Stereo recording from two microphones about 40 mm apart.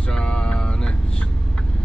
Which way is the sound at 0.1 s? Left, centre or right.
Left.